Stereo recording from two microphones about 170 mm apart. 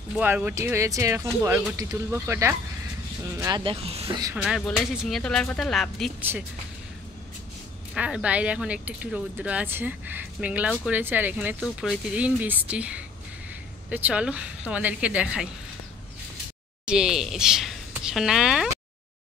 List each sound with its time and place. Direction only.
0.1 s speech: 10° right (ahead or behind); by 4.2 s 35° right (ahead or behind)
4.4 s speech: centre (ahead or behind)
7.9 s speech: 5° right (ahead or behind)
11.6 s speech: centre (ahead or behind)
16.8 s speech: 5° right (ahead or behind)